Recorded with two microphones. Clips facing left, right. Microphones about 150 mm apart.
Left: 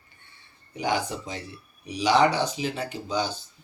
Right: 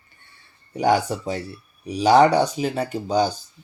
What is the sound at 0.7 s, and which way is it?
Speech, 40° right (ahead or behind).